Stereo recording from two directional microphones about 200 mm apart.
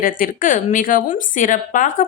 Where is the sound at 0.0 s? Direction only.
45° left (ahead or behind).